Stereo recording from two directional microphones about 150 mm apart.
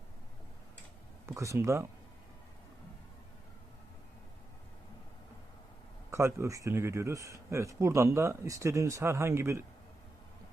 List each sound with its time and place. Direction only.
1.4 s speech: 20° right (ahead or behind)
6.1 s speech: 20° right (ahead or behind)